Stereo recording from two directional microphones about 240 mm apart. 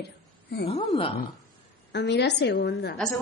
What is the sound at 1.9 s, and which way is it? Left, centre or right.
A woman's voice, left.